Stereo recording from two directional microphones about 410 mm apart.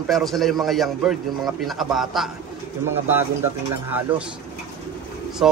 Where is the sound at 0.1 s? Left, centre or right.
Centre.